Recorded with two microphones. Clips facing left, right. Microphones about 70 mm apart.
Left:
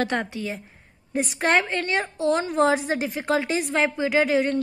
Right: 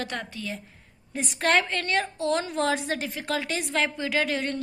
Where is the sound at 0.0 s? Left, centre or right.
Left.